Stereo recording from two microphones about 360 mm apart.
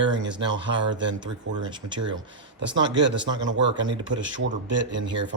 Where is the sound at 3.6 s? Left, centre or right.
Right.